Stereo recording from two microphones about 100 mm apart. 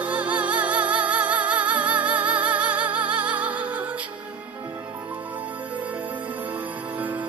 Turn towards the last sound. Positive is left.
turn(degrees=-15)  # may be behind; listen again after turning